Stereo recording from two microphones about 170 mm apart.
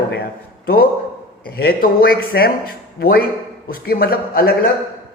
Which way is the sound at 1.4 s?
60° left (ahead or behind).